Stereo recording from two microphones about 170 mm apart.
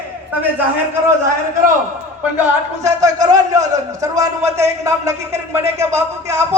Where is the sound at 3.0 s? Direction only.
20° right (ahead or behind).